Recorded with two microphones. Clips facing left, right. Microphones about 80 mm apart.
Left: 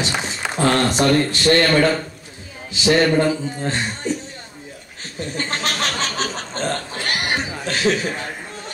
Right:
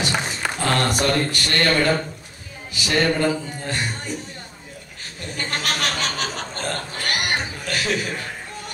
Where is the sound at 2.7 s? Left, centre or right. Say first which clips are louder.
Left 5 dB; left.